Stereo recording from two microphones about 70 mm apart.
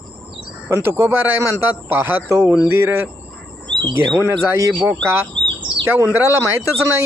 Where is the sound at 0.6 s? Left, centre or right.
Right.